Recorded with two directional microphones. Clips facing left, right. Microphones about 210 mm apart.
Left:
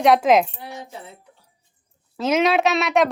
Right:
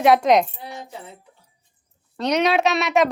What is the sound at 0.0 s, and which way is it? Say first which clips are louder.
Speech: even; centre (ahead or behind).